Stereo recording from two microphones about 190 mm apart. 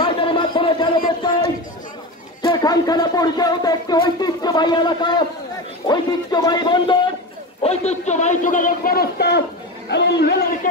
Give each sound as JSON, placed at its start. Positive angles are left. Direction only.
{"t": 0.0, "sound": "a sound", "side_deg": 25}
{"t": 2.4, "sound": "a man's voice", "side_deg": 20}
{"t": 7.6, "sound": "a man's voice", "side_deg": 35}